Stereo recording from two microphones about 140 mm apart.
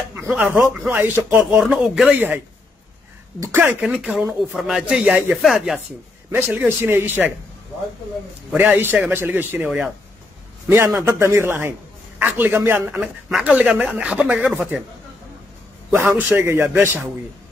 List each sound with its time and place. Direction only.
0.1 s speech: 15° right (ahead or behind)
6.3 s speech: 15° right (ahead or behind)
8.5 s speech: 15° right (ahead or behind)
10.7 s speech: 20° right (ahead or behind)
15.9 s speech: 15° right (ahead or behind)